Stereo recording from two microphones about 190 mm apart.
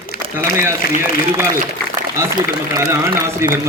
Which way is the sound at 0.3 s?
15° right (ahead or behind).